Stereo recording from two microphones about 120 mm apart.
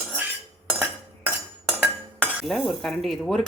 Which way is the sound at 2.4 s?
Centre (ahead or behind).